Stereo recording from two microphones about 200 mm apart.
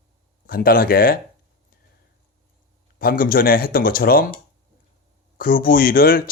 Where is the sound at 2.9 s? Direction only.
45° left (ahead or behind).